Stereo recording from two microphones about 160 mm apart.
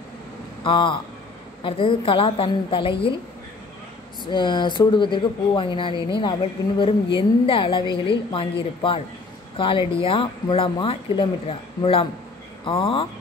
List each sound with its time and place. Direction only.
0.7 s speech: 30° left (ahead or behind)
4.3 s speech: 30° left (ahead or behind)